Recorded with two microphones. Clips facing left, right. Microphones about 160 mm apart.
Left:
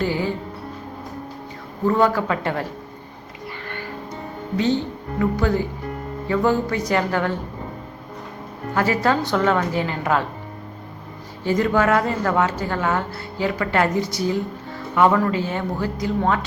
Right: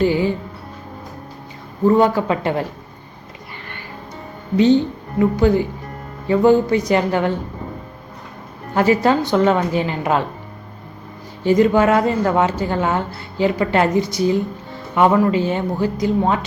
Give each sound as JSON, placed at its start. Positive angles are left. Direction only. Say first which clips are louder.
{"t": 0.0, "sound": "a woman's voice", "louder": "right 6 dB", "side_deg": -20}
{"t": 1.9, "sound": "a woman's voice", "louder": "right 4 dB", "side_deg": -20}
{"t": 4.5, "sound": "a woman's voice", "louder": "right 7 dB", "side_deg": -20}
{"t": 8.7, "sound": "a woman's voice", "louder": "right 5 dB", "side_deg": -20}
{"t": 11.4, "sound": "a woman's voice", "louder": "right 5 dB", "side_deg": -20}